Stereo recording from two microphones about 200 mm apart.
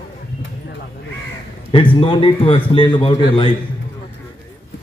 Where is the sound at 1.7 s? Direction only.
25° left (ahead or behind).